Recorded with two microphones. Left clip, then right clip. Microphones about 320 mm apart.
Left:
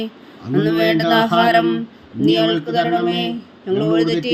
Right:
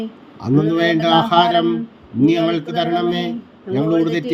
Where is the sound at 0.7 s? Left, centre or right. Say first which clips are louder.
Even; right.